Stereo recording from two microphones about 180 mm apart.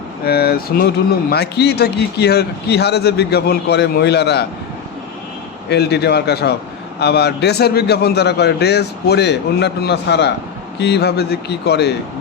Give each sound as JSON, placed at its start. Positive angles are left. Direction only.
{"t": 0.3, "sound": "a man's voice", "side_deg": 60}
{"t": 5.6, "sound": "a man's voice", "side_deg": 65}